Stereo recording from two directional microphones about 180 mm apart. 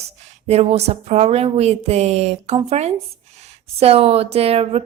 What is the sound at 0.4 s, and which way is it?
Speech, 35° right (ahead or behind).